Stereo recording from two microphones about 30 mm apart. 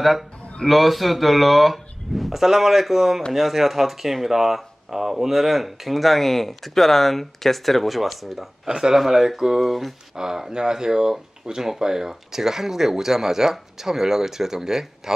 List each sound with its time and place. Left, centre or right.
0.7 s speech: centre
8.6 s speech: centre
10.1 s speech: centre